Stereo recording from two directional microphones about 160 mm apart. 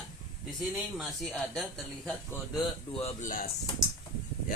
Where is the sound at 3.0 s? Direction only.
45° left (ahead or behind).